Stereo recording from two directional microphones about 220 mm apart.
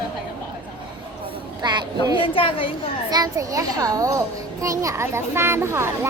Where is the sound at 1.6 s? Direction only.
20° right (ahead or behind).